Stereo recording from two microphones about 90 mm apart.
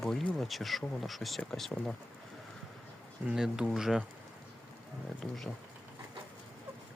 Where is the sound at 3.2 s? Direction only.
5° right (ahead or behind).